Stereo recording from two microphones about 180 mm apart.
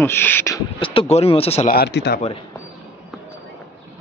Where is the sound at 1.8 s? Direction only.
65° left (ahead or behind).